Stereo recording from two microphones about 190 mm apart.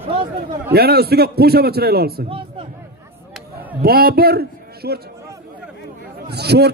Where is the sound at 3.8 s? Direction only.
55° right (ahead or behind).